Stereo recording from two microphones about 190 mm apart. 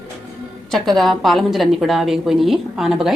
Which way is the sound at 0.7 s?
Centre (ahead or behind).